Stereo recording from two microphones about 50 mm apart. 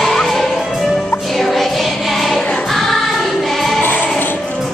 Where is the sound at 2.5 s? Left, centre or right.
Centre.